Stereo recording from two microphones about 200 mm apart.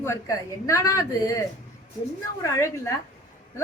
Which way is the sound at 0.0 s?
15° left (ahead or behind).